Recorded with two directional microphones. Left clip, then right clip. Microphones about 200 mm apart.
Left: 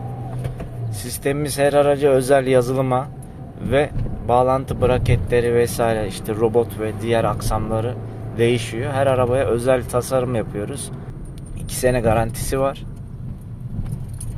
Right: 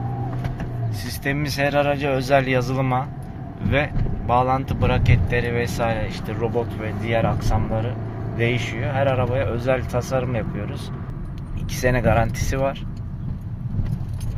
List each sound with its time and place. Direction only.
1.0 s speech: 20° left (ahead or behind)
8.4 s speech: 25° left (ahead or behind)
11.7 s speech: 15° left (ahead or behind)